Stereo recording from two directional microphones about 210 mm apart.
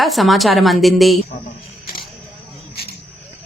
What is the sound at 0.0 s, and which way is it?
A woman's voice, centre (ahead or behind).